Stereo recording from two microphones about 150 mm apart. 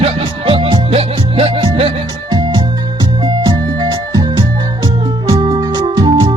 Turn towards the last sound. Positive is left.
turn(degrees=-30)  # may be behind; listen again after turning